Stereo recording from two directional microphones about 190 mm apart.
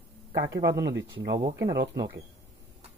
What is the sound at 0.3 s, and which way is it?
Speech, 20° right (ahead or behind).